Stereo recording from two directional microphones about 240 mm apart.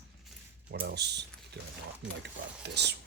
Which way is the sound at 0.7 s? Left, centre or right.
Right.